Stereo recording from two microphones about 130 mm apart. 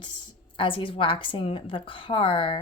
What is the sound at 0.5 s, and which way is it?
Speech, 40° left (ahead or behind).